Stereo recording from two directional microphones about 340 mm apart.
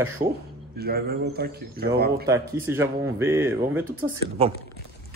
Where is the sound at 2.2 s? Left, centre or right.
Centre.